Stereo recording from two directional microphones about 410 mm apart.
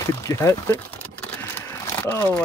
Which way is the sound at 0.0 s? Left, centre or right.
Centre.